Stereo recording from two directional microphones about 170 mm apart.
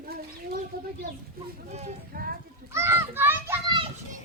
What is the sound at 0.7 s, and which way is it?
Chicken, 60° right (ahead or behind).